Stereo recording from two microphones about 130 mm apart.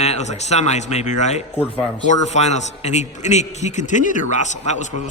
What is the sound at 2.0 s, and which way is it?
A man's voice, 65° left (ahead or behind).